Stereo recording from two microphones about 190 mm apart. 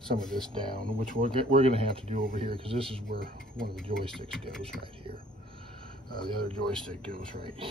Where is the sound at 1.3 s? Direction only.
30° right (ahead or behind).